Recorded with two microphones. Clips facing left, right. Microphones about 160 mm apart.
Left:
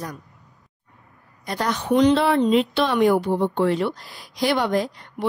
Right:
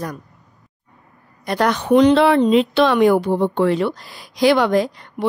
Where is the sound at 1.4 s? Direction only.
70° right (ahead or behind).